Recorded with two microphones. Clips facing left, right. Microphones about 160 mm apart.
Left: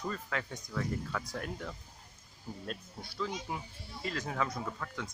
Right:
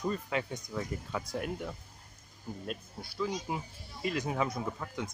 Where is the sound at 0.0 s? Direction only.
20° right (ahead or behind).